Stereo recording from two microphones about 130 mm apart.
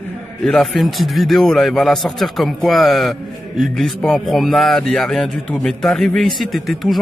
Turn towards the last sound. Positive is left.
turn(degrees=0)  # may be behind; listen again after turning